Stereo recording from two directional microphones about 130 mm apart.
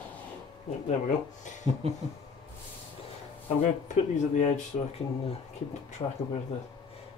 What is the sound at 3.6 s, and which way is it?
Speech, 60° left (ahead or behind).